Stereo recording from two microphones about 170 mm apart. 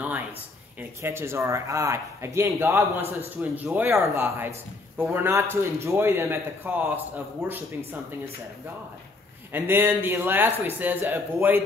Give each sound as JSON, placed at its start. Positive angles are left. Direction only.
{"t": 0.7, "sound": "speech", "side_deg": -15}
{"t": 9.5, "sound": "speech", "side_deg": -10}